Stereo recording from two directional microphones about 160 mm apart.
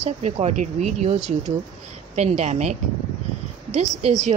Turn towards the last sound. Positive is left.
turn(degrees=-45)  # may be behind; listen again after turning